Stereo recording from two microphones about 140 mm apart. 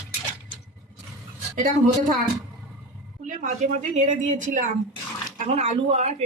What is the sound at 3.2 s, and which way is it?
A woman's voice, 65° right (ahead or behind).